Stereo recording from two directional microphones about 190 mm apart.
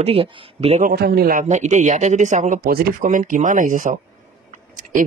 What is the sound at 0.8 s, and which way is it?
Speech, 55° right (ahead or behind).